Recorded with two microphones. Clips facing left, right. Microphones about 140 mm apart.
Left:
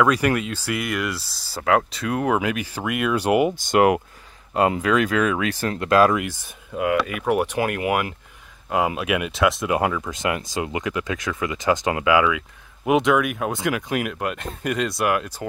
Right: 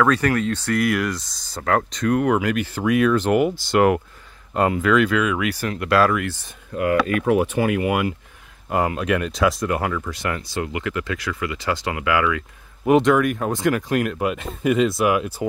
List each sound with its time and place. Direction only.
0.0 s speech: 15° left (ahead or behind)
1.6 s speech: 15° left (ahead or behind)
1.9 s speech: 5° left (ahead or behind)
5.0 s speech: 35° left (ahead or behind); by 6.3 s 20° left (ahead or behind)
6.7 s speech: 5° left (ahead or behind)
9.7 s speech: 15° left (ahead or behind); by 15.4 s 5° right (ahead or behind)